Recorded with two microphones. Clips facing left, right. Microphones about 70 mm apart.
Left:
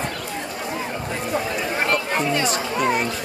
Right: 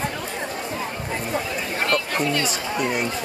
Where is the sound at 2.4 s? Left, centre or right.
Left.